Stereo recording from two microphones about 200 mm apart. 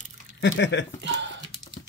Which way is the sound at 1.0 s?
65° right (ahead or behind).